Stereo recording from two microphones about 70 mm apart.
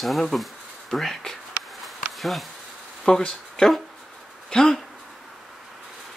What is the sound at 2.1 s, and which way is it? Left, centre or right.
Bee, centre.